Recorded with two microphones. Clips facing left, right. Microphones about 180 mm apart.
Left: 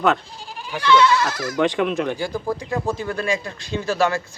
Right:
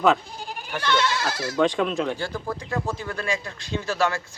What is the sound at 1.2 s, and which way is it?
Speech, 30° right (ahead or behind).